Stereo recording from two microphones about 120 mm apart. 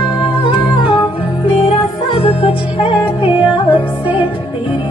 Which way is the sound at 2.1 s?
50° left (ahead or behind).